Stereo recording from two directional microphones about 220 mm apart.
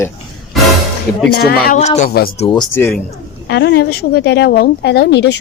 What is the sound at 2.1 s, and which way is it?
Speech, 45° left (ahead or behind).